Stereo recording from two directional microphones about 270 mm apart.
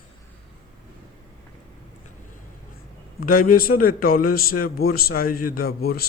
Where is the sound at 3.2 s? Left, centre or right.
Left.